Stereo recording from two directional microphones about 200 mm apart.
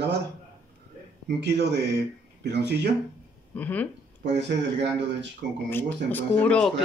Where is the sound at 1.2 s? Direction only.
55° right (ahead or behind).